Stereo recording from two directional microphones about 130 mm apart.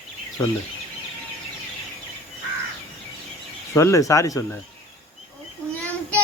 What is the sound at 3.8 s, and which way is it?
Speech, 25° left (ahead or behind).